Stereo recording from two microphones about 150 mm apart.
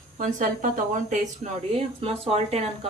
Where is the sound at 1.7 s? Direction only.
40° right (ahead or behind).